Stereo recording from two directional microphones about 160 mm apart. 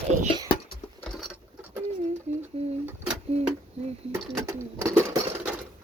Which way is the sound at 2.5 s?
40° right (ahead or behind).